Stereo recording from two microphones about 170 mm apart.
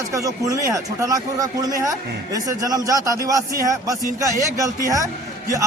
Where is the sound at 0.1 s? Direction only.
20° right (ahead or behind).